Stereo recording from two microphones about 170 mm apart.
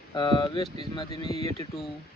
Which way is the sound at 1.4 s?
40° right (ahead or behind).